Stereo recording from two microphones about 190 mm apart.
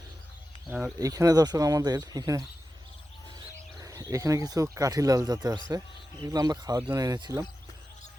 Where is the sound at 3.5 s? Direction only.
15° right (ahead or behind).